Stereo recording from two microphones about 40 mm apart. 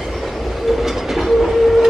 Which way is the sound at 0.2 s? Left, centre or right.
Centre.